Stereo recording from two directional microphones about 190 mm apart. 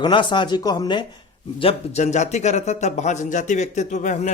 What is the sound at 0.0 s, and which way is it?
A man's voice, 25° left (ahead or behind).